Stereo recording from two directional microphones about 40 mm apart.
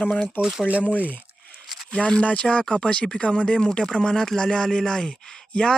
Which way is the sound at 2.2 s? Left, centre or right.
Left.